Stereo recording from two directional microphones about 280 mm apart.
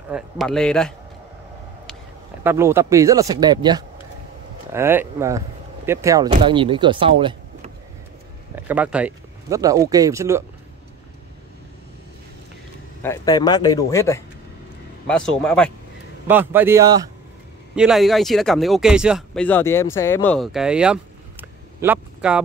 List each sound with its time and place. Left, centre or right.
0.1 s speech: centre
2.4 s speech: centre
8.5 s speech: centre
13.0 s speech: centre
17.7 s speech: centre